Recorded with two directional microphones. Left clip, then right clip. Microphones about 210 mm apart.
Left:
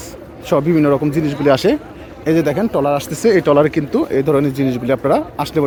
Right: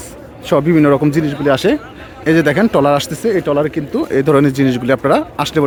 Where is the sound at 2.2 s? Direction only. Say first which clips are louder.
Right 3 dB; 15° right (ahead or behind).